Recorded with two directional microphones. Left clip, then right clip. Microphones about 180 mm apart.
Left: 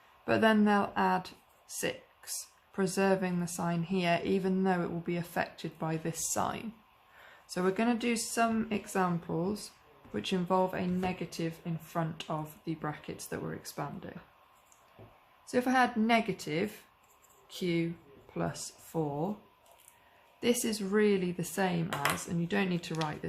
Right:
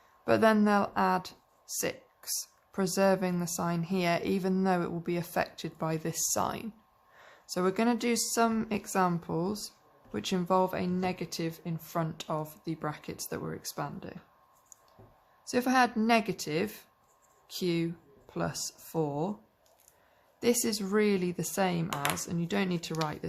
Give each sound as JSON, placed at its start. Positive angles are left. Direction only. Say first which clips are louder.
{"t": 0.3, "sound": "speech", "louder": "right 2 dB", "side_deg": -40}
{"t": 15.4, "sound": "speech", "louder": "right 1 dB", "side_deg": -50}
{"t": 20.4, "sound": "speech", "louder": "right 2 dB", "side_deg": -45}